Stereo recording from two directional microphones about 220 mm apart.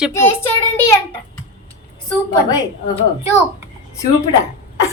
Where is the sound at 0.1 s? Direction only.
10° left (ahead or behind).